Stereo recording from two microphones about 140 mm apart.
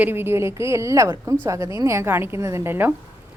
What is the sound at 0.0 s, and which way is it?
A woman's voice, 15° right (ahead or behind).